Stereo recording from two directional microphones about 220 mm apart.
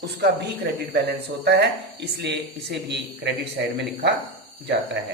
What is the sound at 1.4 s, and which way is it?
Speech, 50° right (ahead or behind).